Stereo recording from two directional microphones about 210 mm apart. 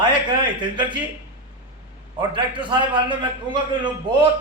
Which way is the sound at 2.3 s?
25° right (ahead or behind).